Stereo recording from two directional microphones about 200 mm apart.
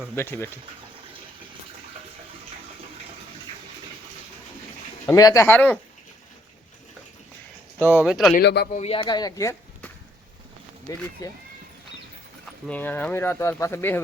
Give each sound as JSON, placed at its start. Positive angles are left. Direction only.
{"t": 0.2, "sound": "speech", "side_deg": 10}
{"t": 5.0, "sound": "speech", "side_deg": 15}
{"t": 7.8, "sound": "speech", "side_deg": -5}
{"t": 8.4, "sound": "speech", "side_deg": 55}
{"t": 8.7, "sound": "speech", "side_deg": 30}
{"t": 12.6, "sound": "speech", "side_deg": 10}